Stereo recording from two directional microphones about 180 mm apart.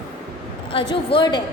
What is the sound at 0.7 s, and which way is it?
Speech, 25° left (ahead or behind).